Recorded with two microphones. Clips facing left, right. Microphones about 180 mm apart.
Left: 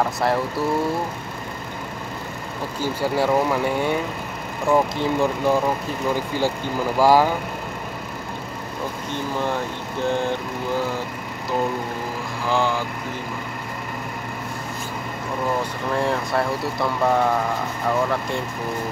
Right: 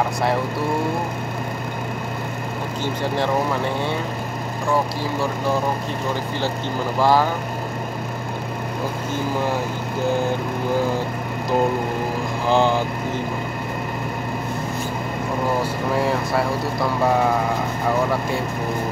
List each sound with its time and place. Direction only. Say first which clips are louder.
2.8 s speech: left 2 dB; 10° left (ahead or behind)
7.0 s speech: left 2 dB; 10° left (ahead or behind)
12.4 s speech: right 4 dB; 20° right (ahead or behind)
16.0 s speech: even; centre (ahead or behind)